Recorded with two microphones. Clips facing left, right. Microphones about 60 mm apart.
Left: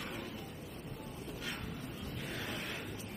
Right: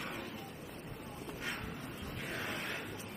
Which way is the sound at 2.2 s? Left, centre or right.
Right.